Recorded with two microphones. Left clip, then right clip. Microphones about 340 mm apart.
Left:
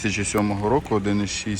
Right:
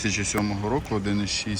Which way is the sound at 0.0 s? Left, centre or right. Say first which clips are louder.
Left 3 dB; centre.